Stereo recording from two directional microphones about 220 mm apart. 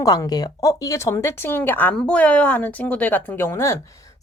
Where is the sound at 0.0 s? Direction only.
15° left (ahead or behind).